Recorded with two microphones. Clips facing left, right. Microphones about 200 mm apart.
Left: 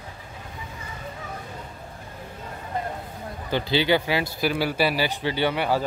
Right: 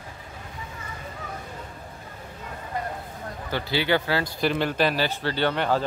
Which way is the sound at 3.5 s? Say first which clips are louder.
Left 3 dB; 20° left (ahead or behind).